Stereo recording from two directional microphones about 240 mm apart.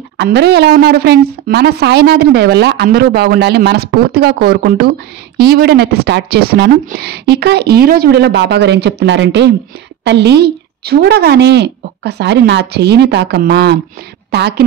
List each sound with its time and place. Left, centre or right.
0.2 s a woman's voice: right